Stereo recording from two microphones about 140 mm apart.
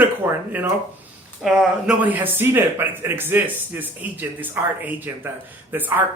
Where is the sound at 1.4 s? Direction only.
5° right (ahead or behind).